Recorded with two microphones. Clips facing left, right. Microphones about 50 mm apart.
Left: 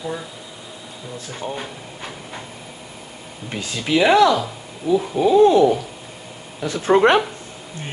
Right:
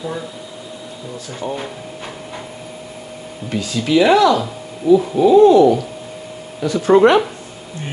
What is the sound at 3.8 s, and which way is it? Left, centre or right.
Speech, centre.